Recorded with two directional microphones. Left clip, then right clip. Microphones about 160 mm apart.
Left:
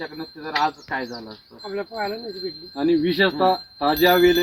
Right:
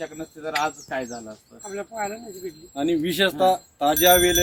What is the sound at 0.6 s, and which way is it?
Speech, 30° right (ahead or behind).